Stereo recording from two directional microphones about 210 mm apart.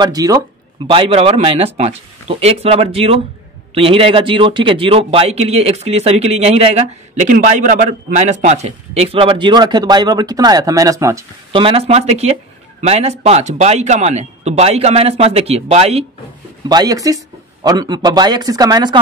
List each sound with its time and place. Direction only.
0.0 s a man's voice: 15° right (ahead or behind)
11.5 s a man's voice: 25° right (ahead or behind)
16.6 s a man's voice: 20° right (ahead or behind)